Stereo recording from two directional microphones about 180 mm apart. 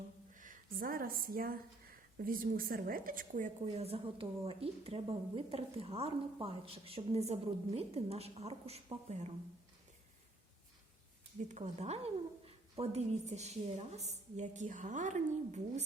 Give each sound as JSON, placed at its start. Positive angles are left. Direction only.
{"t": 0.3, "sound": "speech", "side_deg": -50}
{"t": 11.4, "sound": "speech", "side_deg": -40}